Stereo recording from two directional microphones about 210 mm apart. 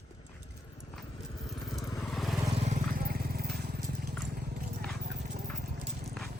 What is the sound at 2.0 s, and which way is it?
Vehicle, centre (ahead or behind).